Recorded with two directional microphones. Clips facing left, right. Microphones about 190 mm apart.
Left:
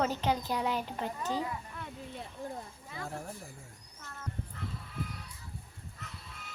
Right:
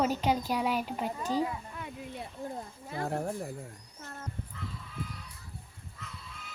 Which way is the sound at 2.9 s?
55° right (ahead or behind).